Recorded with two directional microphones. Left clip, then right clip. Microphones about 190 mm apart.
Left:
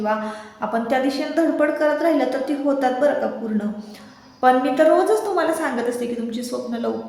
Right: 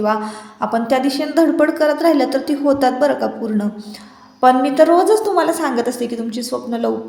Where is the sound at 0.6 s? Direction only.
40° right (ahead or behind).